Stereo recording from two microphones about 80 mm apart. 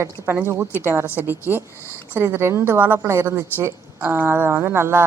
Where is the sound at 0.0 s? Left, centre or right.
Right.